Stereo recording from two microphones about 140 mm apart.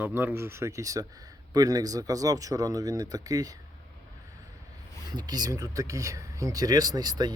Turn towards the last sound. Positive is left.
turn(degrees=-30)  # may be behind; listen again after turning